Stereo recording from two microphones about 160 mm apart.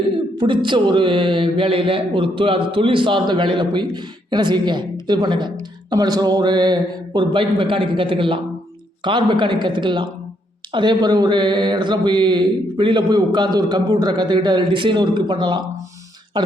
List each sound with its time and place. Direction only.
0.3 s a man's voice: 30° right (ahead or behind)